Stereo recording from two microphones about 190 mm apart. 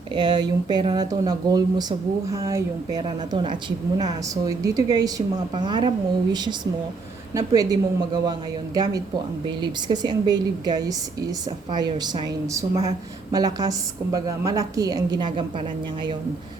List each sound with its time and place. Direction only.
0.1 s a woman's voice: 25° right (ahead or behind)